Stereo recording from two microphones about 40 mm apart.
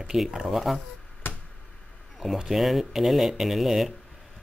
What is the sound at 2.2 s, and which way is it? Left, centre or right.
Speech, centre.